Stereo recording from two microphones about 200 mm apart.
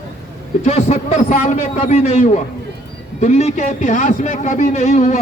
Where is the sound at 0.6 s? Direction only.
35° left (ahead or behind).